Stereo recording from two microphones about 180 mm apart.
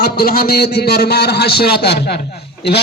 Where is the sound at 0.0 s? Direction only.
55° left (ahead or behind).